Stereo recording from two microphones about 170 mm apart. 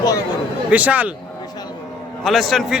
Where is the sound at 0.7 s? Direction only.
10° right (ahead or behind).